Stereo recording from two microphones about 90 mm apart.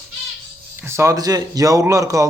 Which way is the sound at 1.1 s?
45° right (ahead or behind).